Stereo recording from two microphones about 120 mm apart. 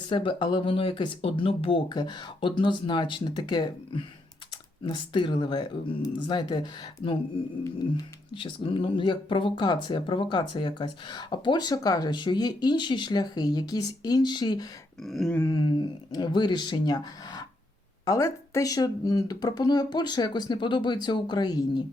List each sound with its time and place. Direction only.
0.1 s speech: 45° left (ahead or behind)
8.3 s speech: 45° left (ahead or behind)
15.0 s a sound: centre (ahead or behind)
15.4 s speech: 35° left (ahead or behind)